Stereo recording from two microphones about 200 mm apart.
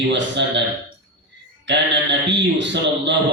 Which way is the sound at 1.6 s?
60° right (ahead or behind).